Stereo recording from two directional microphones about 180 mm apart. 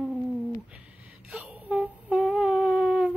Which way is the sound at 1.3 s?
5° right (ahead or behind).